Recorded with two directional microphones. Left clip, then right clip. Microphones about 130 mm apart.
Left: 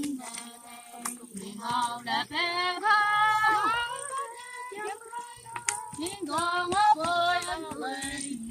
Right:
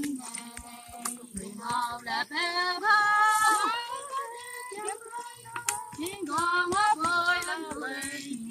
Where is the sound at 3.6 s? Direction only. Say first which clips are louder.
Left 2 dB; 35° right (ahead or behind).